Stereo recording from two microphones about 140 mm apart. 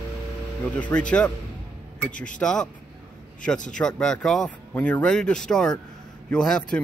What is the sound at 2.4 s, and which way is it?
Speech, 5° left (ahead or behind).